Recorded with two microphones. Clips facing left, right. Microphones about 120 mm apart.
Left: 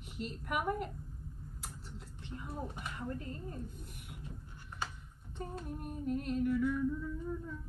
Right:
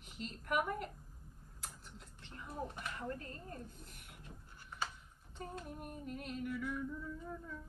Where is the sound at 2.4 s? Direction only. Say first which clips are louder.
Even; 15° left (ahead or behind).